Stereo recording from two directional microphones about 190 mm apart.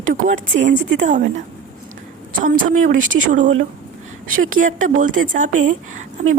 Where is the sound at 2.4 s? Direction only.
45° right (ahead or behind).